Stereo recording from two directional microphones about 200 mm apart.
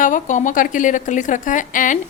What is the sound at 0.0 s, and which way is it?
A woman's voice, 40° left (ahead or behind).